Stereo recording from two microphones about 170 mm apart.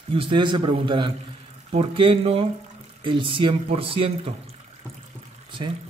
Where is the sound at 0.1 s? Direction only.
30° right (ahead or behind).